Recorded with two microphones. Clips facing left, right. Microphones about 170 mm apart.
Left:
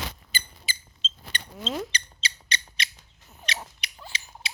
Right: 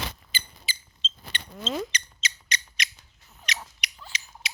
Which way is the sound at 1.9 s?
30° left (ahead or behind).